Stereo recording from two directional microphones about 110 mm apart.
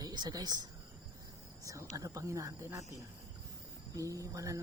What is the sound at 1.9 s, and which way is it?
Speech, 30° right (ahead or behind).